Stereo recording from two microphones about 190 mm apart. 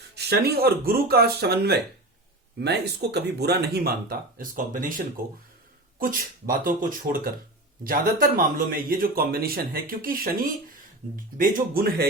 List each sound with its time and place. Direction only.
0.1 s speech: 60° right (ahead or behind)
6.0 s a man's voice: 45° right (ahead or behind)